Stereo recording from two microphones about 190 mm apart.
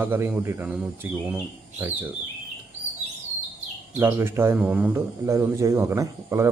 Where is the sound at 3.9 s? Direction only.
10° right (ahead or behind).